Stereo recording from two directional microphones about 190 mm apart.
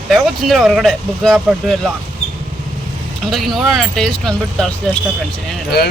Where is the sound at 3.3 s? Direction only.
Centre (ahead or behind).